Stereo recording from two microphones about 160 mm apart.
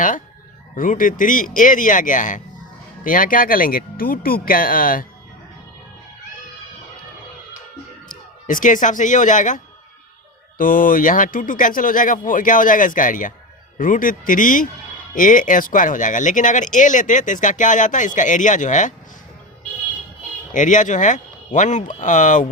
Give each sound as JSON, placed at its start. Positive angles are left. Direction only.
{"t": 0.8, "sound": "speech", "side_deg": 55}
{"t": 8.0, "sound": "speech", "side_deg": 55}
{"t": 10.6, "sound": "speech", "side_deg": 60}
{"t": 20.5, "sound": "speech", "side_deg": 50}